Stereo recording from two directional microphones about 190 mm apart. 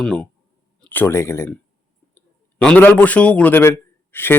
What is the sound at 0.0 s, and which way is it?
Speech, 5° left (ahead or behind).